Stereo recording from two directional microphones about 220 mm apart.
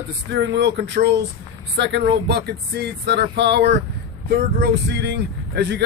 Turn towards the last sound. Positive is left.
turn(degrees=-50)  # may be behind; listen again after turning